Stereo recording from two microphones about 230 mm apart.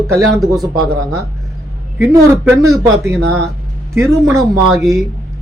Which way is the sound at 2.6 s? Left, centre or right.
Centre.